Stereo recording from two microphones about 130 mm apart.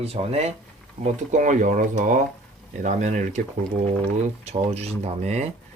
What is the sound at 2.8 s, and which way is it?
Speech, 70° right (ahead or behind).